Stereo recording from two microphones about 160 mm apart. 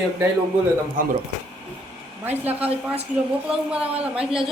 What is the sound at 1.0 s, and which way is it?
Speech, 60° right (ahead or behind).